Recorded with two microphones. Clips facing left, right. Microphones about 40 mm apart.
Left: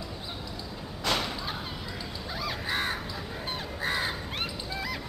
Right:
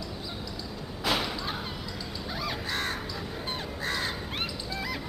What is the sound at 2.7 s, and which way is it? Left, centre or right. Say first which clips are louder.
Crow: left 1 dB; centre.